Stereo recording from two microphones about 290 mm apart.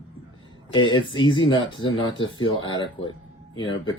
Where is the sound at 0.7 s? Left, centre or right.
Centre.